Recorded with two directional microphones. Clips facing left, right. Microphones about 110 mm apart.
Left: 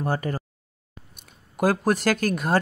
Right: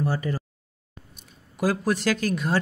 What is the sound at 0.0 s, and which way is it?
Speech, 50° left (ahead or behind).